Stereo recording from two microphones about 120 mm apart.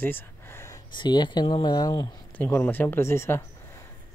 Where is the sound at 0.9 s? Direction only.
40° left (ahead or behind).